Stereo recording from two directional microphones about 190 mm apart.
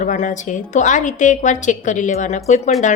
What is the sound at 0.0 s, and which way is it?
A woman's voice, 45° left (ahead or behind).